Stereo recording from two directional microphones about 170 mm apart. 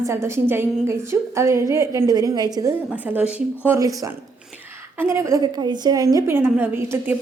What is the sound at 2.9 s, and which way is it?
Speech, 10° right (ahead or behind).